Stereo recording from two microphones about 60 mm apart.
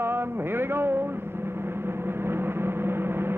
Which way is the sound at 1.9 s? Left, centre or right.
Right.